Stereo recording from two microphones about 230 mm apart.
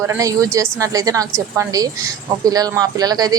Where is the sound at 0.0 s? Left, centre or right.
Centre.